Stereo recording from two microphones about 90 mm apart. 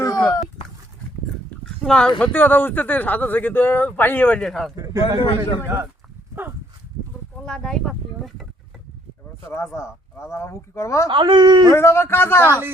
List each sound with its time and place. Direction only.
0.0 s a sound: 40° left (ahead or behind)
1.6 s a man's voice: 5° left (ahead or behind)
4.4 s speech: 5° left (ahead or behind)
4.8 s a man's voice: 40° right (ahead or behind)
7.4 s speech: 5° left (ahead or behind)
9.5 s speech: 30° left (ahead or behind)
11.1 s speech: 60° right (ahead or behind)
11.7 s a man's voice: 30° left (ahead or behind)